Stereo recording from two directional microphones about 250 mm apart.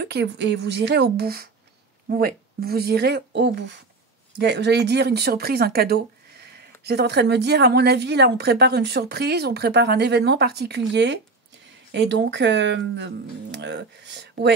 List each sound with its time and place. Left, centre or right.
0.0 s speech: right